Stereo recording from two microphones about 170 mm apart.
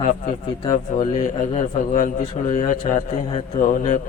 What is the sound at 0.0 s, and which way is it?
Speech, 40° left (ahead or behind).